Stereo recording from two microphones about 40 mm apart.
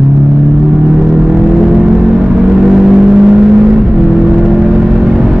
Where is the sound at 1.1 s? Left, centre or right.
Centre.